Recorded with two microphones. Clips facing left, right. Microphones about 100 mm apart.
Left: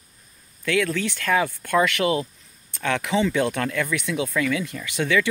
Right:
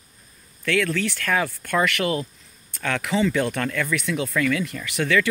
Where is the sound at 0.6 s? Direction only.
15° left (ahead or behind).